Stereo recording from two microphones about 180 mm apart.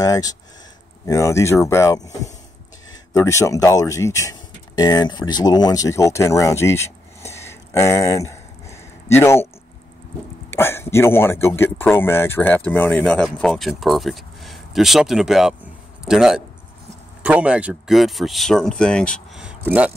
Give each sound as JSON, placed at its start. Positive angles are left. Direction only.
{"t": 0.0, "sound": "speech", "side_deg": 20}
{"t": 3.1, "sound": "speech", "side_deg": 15}
{"t": 10.5, "sound": "speech", "side_deg": 15}
{"t": 19.4, "sound": "vehicle", "side_deg": -5}